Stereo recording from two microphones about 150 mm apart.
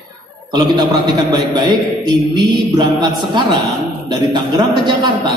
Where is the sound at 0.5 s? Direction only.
30° right (ahead or behind).